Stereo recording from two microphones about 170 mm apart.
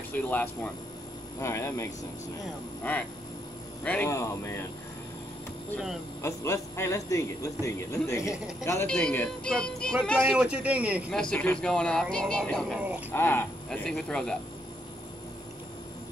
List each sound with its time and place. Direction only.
0.1 s a man's voice: 10° left (ahead or behind)
6.2 s a man's voice: 15° left (ahead or behind); by 11.1 s 10° right (ahead or behind)
11.1 s speech: 5° left (ahead or behind)